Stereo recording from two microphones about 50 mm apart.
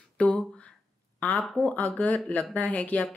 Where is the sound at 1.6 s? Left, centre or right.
Left.